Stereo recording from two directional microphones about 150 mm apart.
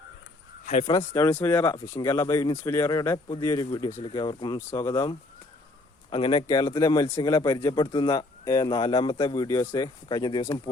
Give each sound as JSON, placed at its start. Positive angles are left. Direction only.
{"t": 0.6, "sound": "a sound", "side_deg": 50}
{"t": 0.9, "sound": "a man's voice", "side_deg": 25}
{"t": 6.1, "sound": "a man's voice", "side_deg": 35}